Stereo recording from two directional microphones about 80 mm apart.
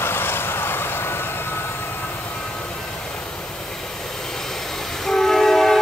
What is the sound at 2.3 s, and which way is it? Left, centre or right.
Vehicle, centre.